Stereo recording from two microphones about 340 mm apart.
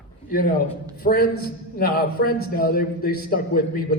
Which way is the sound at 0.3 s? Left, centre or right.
Left.